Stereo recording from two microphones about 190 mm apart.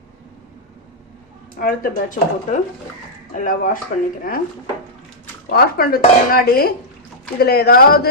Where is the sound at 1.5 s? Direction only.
45° left (ahead or behind).